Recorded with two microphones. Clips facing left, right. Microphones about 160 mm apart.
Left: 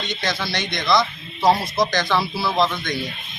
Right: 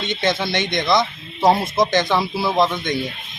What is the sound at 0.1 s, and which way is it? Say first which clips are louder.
Speech: right 7 dB; 25° right (ahead or behind).